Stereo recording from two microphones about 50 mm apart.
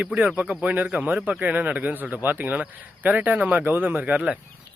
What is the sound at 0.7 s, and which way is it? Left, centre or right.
Speech, right.